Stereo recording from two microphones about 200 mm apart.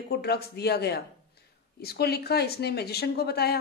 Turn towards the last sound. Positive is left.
turn(degrees=55)  # may be behind; listen again after turning